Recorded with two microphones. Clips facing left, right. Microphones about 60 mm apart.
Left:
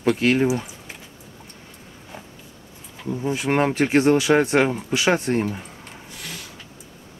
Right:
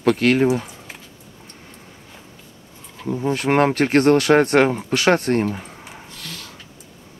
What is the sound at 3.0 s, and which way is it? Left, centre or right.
Speech, centre.